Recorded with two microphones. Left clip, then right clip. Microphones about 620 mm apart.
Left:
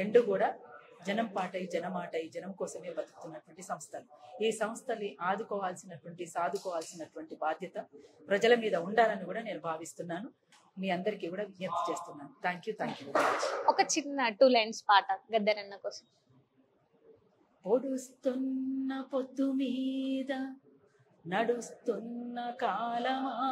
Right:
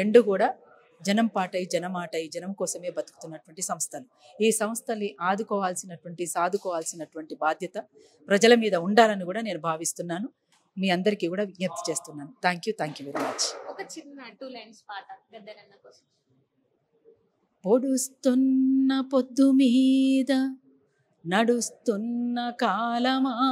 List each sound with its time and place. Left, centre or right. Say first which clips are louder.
0.0 s speech: right 7 dB; right
13.7 s a woman's voice: left 10 dB; left
17.6 s a woman's voice: right 7 dB; right